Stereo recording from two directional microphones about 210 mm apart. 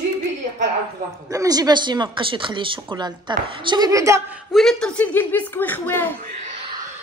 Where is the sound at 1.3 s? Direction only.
15° right (ahead or behind); by 6.1 s 10° left (ahead or behind).